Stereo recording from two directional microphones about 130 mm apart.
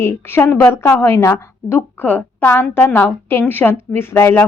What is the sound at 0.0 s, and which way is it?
A woman's voice, 20° left (ahead or behind).